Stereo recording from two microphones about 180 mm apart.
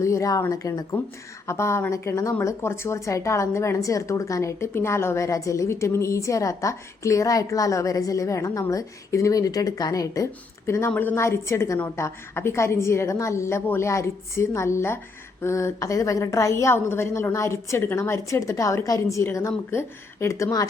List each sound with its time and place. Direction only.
0.0 s a woman's voice: 15° left (ahead or behind)